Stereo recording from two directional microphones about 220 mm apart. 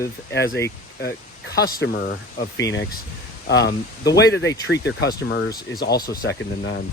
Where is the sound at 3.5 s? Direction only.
50° left (ahead or behind).